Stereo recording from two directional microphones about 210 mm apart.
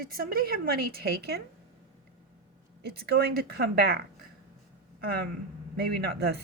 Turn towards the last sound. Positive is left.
turn(degrees=-50)  # may be behind; listen again after turning